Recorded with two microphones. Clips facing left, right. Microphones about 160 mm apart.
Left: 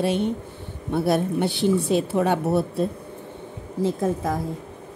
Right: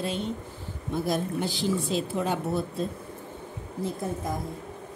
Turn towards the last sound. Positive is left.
turn(degrees=90)